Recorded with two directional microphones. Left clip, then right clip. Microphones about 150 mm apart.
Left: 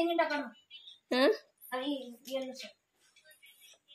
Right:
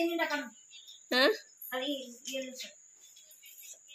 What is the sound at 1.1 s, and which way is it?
Speech, 15° left (ahead or behind).